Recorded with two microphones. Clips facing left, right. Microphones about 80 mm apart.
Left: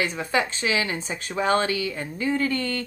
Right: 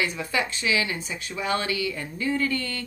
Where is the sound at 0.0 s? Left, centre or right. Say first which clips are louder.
Left 2 dB; left.